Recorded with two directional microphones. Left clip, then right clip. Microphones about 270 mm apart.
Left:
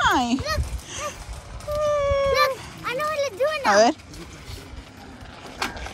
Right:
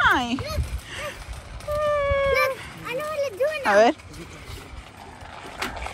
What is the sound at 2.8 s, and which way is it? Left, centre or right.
A child's voice, centre.